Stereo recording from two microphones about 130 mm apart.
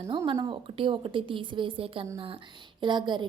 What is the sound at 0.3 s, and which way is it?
A woman's voice, 35° right (ahead or behind).